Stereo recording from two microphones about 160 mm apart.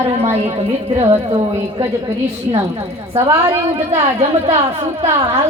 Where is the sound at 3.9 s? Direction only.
40° right (ahead or behind).